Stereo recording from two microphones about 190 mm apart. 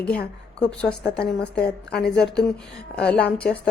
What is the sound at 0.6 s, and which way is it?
A woman's voice, 5° left (ahead or behind).